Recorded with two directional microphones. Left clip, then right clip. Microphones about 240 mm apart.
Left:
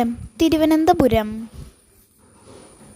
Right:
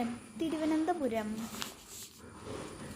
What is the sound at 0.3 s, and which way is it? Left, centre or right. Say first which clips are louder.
Speech: left 16 dB; left.